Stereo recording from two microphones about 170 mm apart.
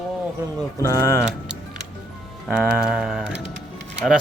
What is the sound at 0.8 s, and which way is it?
Speech, 20° left (ahead or behind).